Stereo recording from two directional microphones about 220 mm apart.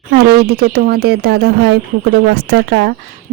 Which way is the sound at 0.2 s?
45° right (ahead or behind).